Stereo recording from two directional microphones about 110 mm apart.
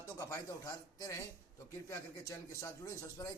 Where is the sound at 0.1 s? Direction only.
30° left (ahead or behind).